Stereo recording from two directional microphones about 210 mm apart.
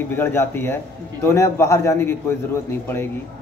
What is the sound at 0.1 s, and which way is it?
A man's voice, 10° left (ahead or behind).